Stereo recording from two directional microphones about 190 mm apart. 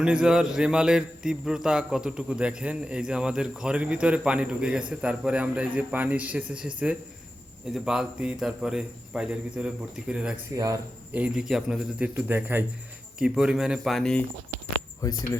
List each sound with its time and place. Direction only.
0.0 s a man's voice: 5° right (ahead or behind)
10.6 s speech: 15° right (ahead or behind)
11.2 s a man's voice: 5° right (ahead or behind)
15.0 s speech: 20° left (ahead or behind)